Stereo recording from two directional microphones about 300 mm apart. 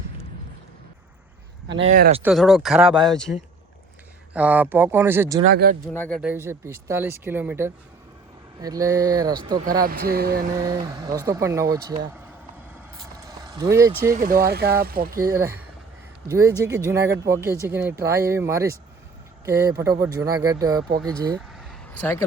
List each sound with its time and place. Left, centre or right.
1.8 s speech: right
2.2 s speech: centre
5.4 s speech: right
5.9 s speech: centre
9.8 s speech: right
10.8 s speech: centre
13.2 s speech: centre
14.2 s speech: right
15.2 s speech: centre
21.3 s vehicle: centre